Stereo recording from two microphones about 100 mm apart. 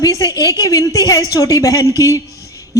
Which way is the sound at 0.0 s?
40° left (ahead or behind).